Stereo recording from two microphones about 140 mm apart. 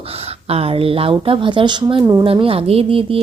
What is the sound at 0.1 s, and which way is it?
Speech, 45° right (ahead or behind).